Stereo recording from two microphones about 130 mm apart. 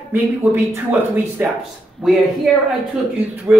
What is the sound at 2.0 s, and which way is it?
Speech, centre (ahead or behind).